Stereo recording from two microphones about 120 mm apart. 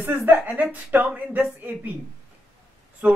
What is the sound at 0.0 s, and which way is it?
Speech, 15° right (ahead or behind).